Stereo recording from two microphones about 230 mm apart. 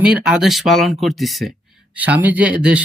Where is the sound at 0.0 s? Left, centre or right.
Centre.